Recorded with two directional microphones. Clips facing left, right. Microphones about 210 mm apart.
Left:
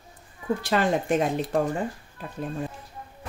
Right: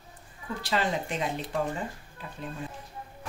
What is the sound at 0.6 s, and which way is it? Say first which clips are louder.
Speech: left 4 dB; 50° left (ahead or behind).